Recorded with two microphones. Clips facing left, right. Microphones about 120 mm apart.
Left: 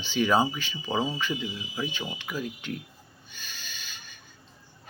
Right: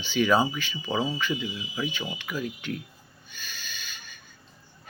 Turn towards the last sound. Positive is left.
turn(degrees=30)  # may be behind; listen again after turning